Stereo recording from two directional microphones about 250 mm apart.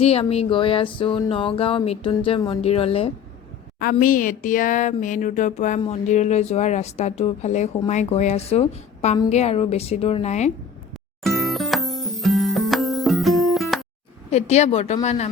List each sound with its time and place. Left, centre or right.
0.0 s speech: left
3.8 s speech: left
11.2 s music: centre
14.3 s speech: left